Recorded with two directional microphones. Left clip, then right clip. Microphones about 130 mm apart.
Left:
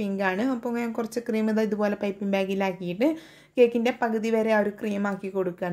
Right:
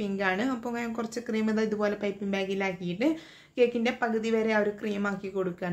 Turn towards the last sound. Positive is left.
turn(degrees=40)  # may be behind; listen again after turning